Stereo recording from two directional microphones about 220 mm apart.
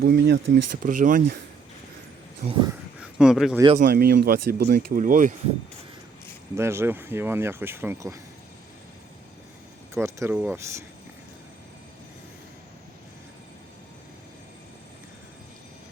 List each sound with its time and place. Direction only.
0.0 s speech: 55° right (ahead or behind)
0.8 s speech: 40° right (ahead or behind)
2.5 s speech: 20° right (ahead or behind)
3.2 s speech: centre (ahead or behind)
3.8 s speech: 45° right (ahead or behind)
6.6 s speech: 10° right (ahead or behind)
9.9 s speech: 10° right (ahead or behind)